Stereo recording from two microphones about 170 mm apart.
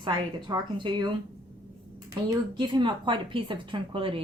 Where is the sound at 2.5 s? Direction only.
25° right (ahead or behind).